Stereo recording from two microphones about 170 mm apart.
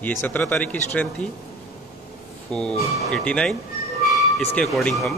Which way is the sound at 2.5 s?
5° left (ahead or behind).